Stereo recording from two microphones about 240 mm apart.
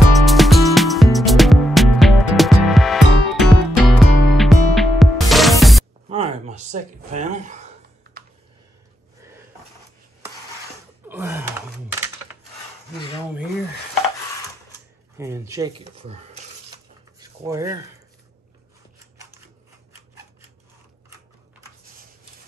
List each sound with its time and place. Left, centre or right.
0.1 s music: centre
6.0 s a sound: right
11.1 s gasp: centre
15.1 s speech: centre
15.8 s speech: right
17.2 s a sound: centre